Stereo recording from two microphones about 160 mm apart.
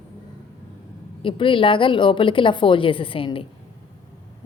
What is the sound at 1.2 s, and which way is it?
A woman's voice, 30° left (ahead or behind).